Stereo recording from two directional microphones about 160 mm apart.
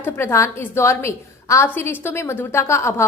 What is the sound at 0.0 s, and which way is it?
A woman's voice, 15° left (ahead or behind).